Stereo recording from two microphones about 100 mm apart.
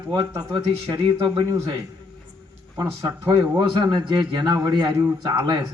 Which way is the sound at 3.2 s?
30° right (ahead or behind).